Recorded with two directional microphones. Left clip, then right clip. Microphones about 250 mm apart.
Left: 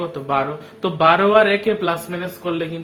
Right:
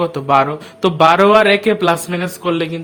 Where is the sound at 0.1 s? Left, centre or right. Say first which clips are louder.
Right 7 dB; right.